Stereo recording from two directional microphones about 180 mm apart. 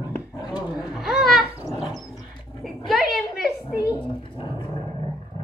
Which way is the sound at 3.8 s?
25° left (ahead or behind).